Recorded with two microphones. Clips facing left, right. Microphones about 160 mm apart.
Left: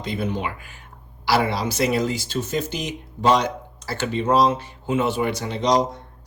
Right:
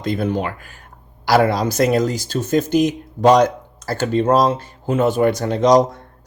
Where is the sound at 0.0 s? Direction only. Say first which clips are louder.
Right 5 dB; 45° right (ahead or behind).